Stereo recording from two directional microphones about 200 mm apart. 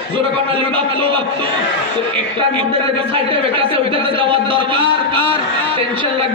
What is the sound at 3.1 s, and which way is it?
A man's voice, 25° right (ahead or behind).